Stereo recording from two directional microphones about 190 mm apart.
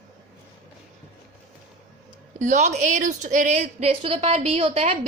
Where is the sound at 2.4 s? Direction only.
40° right (ahead or behind).